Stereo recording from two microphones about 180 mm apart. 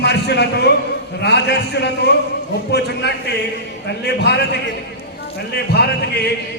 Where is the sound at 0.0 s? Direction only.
70° left (ahead or behind).